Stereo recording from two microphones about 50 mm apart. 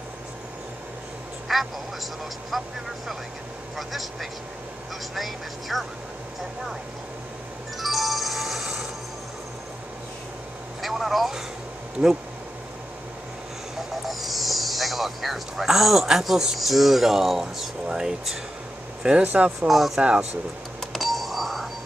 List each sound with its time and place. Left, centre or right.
1.5 s a sound: centre
2.5 s speech: centre
3.7 s speech: centre
7.8 s music: centre
10.8 s speech: centre
14.0 s a sound: centre
16.5 s speech: centre
19.2 s speech: right
20.9 s a sound: centre